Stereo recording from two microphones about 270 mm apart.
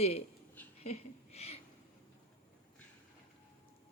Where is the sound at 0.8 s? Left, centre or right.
Left.